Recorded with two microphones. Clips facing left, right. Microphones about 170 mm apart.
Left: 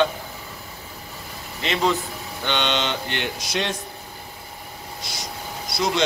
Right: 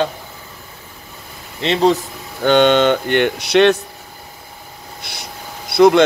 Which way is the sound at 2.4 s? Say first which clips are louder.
Right 13 dB; 45° right (ahead or behind).